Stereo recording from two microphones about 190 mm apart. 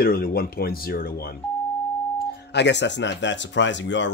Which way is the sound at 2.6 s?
65° left (ahead or behind).